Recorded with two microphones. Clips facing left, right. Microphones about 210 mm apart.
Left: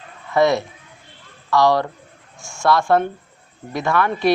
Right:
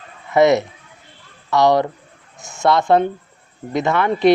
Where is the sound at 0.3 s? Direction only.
20° right (ahead or behind).